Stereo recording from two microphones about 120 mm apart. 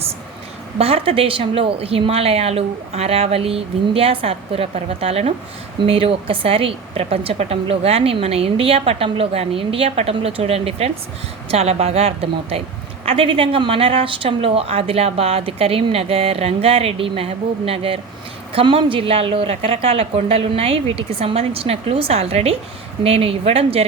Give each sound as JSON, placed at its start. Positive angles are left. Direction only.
{"t": 0.8, "sound": "a woman's voice", "side_deg": -55}